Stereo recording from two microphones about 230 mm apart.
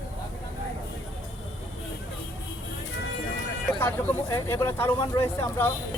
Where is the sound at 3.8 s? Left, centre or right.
Centre.